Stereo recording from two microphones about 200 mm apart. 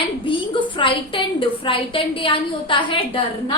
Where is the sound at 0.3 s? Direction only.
25° left (ahead or behind).